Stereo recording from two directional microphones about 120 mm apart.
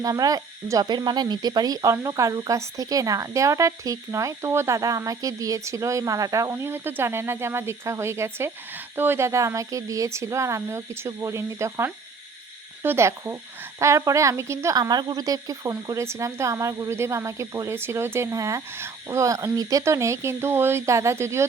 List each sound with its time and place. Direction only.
0.0 s speech: 30° right (ahead or behind)
14.8 s speech: 35° right (ahead or behind)